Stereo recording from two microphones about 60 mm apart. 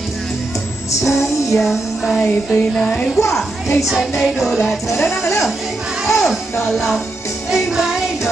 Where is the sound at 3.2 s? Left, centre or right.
Left.